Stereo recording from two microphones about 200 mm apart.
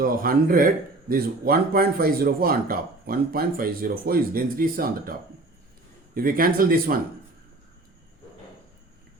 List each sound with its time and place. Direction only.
0.0 s speech: 45° right (ahead or behind)
6.1 s speech: 45° right (ahead or behind)